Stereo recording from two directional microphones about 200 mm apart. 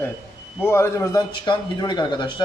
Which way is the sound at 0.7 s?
15° left (ahead or behind).